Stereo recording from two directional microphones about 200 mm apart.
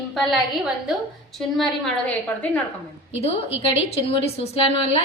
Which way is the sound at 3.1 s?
30° left (ahead or behind).